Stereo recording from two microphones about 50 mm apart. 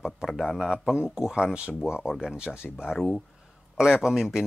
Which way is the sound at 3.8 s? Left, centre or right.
Centre.